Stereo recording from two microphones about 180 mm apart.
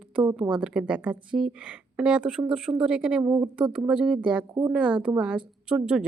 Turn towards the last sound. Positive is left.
turn(degrees=-5)  # may be behind; listen again after turning